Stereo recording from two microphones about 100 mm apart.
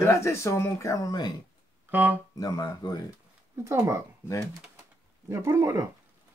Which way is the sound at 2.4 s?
40° left (ahead or behind).